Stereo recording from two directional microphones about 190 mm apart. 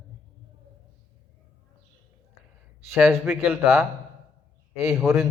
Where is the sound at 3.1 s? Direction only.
10° right (ahead or behind).